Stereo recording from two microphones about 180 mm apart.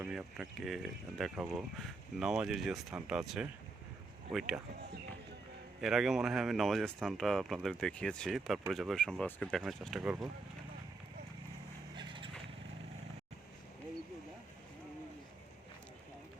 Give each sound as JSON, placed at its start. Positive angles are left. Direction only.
{"t": 0.0, "sound": "speech", "side_deg": -5}
{"t": 5.8, "sound": "speech", "side_deg": 0}
{"t": 11.9, "sound": "vehicle", "side_deg": -25}